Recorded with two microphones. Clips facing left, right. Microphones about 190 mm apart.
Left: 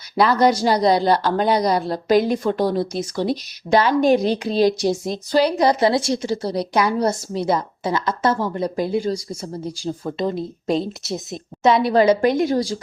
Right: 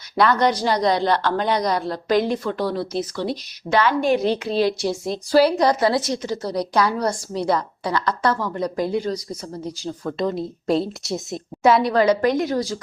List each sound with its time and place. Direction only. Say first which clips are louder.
0.2 s a woman's voice: left 2 dB; 5° left (ahead or behind)
3.8 s speech: left 3 dB; 35° left (ahead or behind)
5.3 s a woman's voice: right 2 dB; 5° right (ahead or behind)
5.6 s a woman's voice: left 2 dB; 25° left (ahead or behind)
9.0 s a woman's voice: left 2 dB; 10° left (ahead or behind)
10.1 s a woman's voice: even; 25° left (ahead or behind)
10.3 s a woman's voice: even; centre (ahead or behind)
11.9 s a woman's voice: left 2 dB; 25° left (ahead or behind)